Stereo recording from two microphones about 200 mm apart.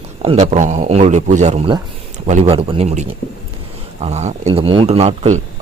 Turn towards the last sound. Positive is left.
turn(degrees=-30)  # may be behind; listen again after turning